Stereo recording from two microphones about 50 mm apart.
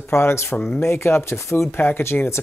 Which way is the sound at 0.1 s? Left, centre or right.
Left.